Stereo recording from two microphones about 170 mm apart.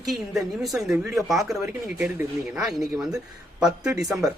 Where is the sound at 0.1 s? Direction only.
Centre (ahead or behind).